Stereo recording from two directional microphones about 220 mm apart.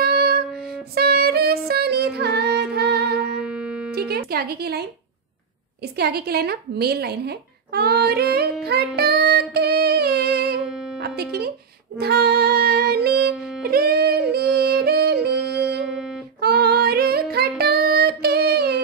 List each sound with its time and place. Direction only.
0.0 s music: 45° right (ahead or behind)
3.4 s music: 5° right (ahead or behind)
3.9 s speech: 45° right (ahead or behind)
5.9 s speech: 45° right (ahead or behind)
8.9 s music: 45° right (ahead or behind)
15.5 s music: 5° right (ahead or behind)
16.3 s female singing: 45° right (ahead or behind)
17.6 s child singing: 45° right (ahead or behind)